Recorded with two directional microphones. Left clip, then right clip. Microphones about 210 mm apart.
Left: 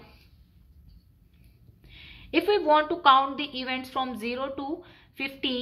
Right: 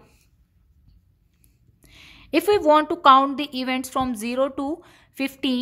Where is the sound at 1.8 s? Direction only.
50° right (ahead or behind).